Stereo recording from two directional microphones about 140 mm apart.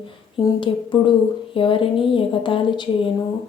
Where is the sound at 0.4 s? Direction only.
35° left (ahead or behind).